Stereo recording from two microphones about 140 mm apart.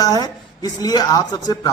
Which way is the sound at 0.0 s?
25° left (ahead or behind).